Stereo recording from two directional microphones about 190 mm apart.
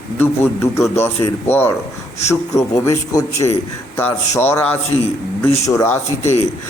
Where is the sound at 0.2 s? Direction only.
15° left (ahead or behind).